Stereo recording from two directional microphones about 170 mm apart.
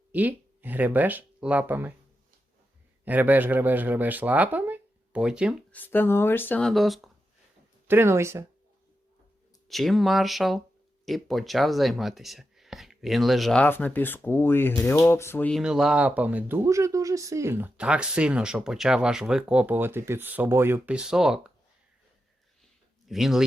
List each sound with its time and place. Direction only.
0.1 s speech: 10° right (ahead or behind)
3.0 s speech: 10° right (ahead or behind)
5.7 s speech: 10° left (ahead or behind)
7.9 s speech: 15° right (ahead or behind)
9.6 s speech: centre (ahead or behind)
15.6 s speech: 5° right (ahead or behind)
23.0 s speech: centre (ahead or behind)